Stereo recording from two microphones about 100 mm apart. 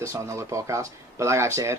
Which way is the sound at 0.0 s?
30° right (ahead or behind).